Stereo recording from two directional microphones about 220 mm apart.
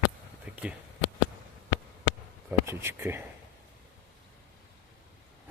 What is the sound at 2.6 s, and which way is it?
Speech, 10° right (ahead or behind).